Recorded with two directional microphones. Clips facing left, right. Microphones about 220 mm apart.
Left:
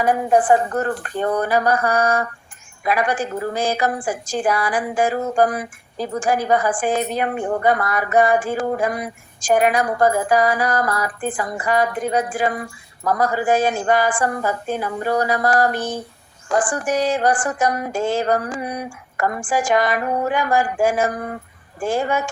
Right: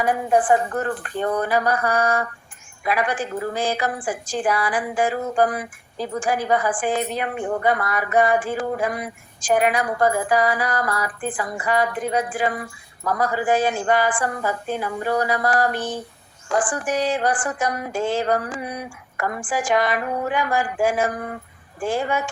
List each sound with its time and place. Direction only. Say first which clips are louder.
0.0 s a woman's voice: left 3 dB; 45° left (ahead or behind)